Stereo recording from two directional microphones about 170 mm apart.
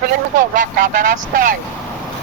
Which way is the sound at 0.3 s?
50° right (ahead or behind).